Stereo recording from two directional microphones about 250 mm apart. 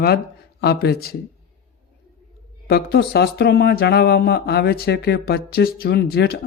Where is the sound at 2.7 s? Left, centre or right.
Left.